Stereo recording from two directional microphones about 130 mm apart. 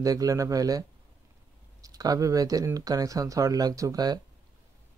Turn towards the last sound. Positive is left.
turn(degrees=-30)  # may be behind; listen again after turning